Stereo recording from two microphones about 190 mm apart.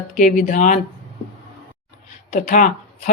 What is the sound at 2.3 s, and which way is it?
Speech, 45° left (ahead or behind).